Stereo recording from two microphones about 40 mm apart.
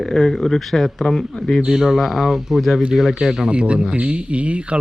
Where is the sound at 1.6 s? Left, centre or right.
Centre.